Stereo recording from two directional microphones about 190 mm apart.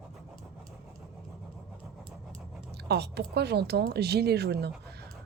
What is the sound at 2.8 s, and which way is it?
A woman's voice, 60° right (ahead or behind).